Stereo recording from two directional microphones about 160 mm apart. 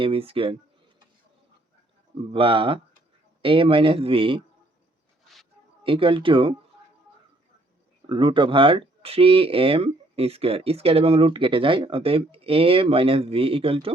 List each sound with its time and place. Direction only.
0.0 s speech: 35° right (ahead or behind)
2.3 s speech: 30° right (ahead or behind)
5.8 s speech: 35° right (ahead or behind)
8.1 s speech: 30° right (ahead or behind)